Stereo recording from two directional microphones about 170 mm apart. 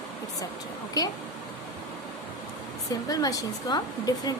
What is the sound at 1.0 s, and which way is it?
Speech, 20° left (ahead or behind).